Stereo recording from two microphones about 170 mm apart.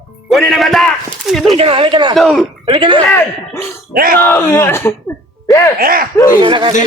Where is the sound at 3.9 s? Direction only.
60° right (ahead or behind).